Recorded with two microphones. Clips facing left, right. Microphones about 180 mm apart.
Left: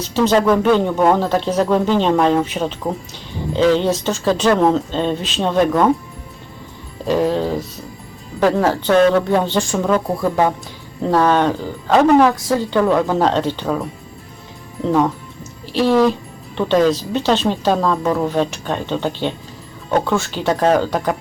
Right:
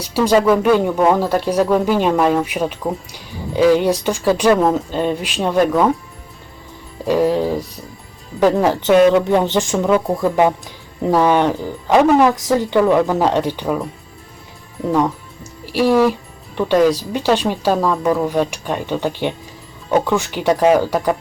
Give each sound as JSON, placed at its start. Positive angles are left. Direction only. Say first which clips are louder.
{"t": 0.0, "sound": "speech", "louder": "right 1 dB", "side_deg": -10}
{"t": 7.1, "sound": "speech", "louder": "right 1 dB", "side_deg": -10}
{"t": 12.8, "sound": "speech", "louder": "even", "side_deg": -5}
{"t": 15.6, "sound": "speech", "louder": "even", "side_deg": -10}